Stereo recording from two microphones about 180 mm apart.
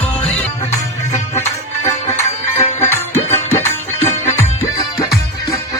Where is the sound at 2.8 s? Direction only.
15° left (ahead or behind).